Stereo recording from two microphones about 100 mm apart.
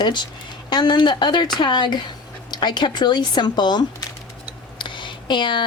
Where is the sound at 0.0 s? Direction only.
50° left (ahead or behind).